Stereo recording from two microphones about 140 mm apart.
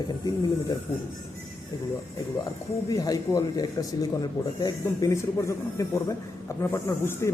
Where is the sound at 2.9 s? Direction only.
25° left (ahead or behind).